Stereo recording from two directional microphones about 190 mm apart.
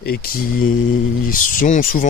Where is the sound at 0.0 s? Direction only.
55° left (ahead or behind).